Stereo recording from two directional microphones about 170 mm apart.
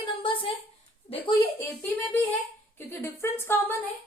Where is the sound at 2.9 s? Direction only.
15° left (ahead or behind).